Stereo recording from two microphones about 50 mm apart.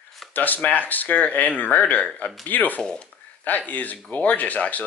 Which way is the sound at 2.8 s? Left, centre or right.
Centre.